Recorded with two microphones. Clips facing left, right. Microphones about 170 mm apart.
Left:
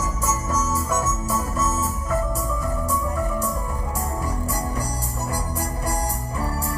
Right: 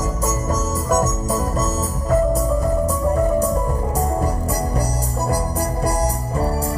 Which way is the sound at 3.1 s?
40° right (ahead or behind).